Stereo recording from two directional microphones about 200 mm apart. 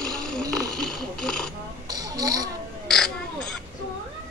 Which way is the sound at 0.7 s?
Centre (ahead or behind).